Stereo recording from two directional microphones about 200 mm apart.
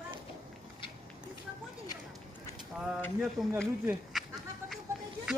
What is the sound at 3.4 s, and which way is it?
Speech, centre (ahead or behind).